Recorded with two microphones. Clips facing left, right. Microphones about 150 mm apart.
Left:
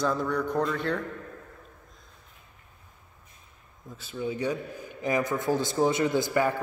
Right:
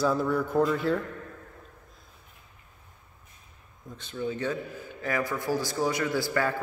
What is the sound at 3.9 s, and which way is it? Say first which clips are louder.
A man's voice: even; 5° left (ahead or behind).